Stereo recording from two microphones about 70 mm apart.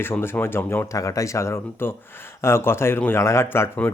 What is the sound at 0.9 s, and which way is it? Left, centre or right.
Speech, left.